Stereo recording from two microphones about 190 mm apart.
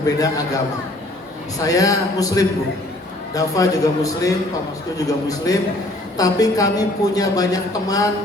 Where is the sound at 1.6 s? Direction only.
20° left (ahead or behind).